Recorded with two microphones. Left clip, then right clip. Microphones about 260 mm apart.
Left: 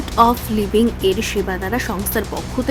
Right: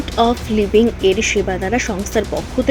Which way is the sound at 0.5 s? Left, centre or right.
Centre.